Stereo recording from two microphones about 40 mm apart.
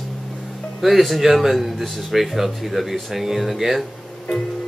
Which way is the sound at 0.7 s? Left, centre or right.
Centre.